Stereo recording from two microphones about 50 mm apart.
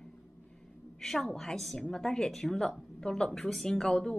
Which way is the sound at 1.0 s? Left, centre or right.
Centre.